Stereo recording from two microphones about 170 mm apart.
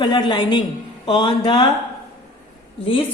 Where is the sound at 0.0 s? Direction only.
25° left (ahead or behind).